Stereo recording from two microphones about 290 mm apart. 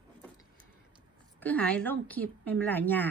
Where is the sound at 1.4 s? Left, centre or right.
Centre.